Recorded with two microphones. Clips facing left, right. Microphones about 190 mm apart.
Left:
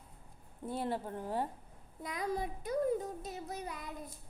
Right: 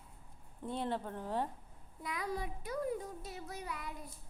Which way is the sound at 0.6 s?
10° left (ahead or behind).